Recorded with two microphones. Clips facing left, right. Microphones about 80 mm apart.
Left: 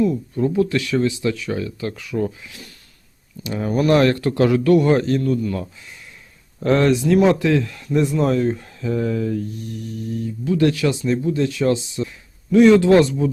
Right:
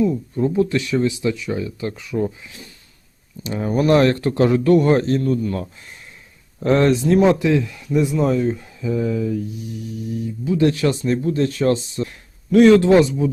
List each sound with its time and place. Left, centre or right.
0.1 s speech: centre
3.4 s speech: right
6.6 s speech: right
10.6 s speech: right
12.0 s a sound: right
12.9 s speech: centre